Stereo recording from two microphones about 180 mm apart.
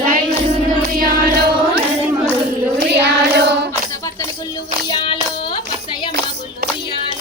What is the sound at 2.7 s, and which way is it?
Child singing, 70° right (ahead or behind).